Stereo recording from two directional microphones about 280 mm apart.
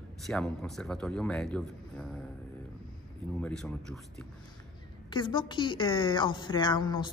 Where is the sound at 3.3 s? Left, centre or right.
Centre.